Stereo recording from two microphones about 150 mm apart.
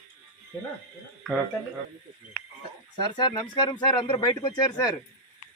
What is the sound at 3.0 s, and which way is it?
Speech, 30° left (ahead or behind).